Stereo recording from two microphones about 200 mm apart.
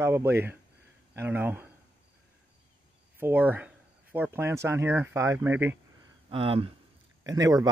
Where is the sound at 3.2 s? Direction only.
10° right (ahead or behind).